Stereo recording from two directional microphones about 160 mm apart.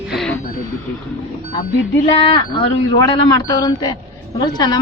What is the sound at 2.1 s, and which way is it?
A woman's voice, 35° left (ahead or behind).